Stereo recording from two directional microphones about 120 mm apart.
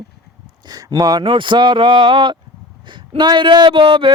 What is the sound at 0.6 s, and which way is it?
Speech, 35° right (ahead or behind).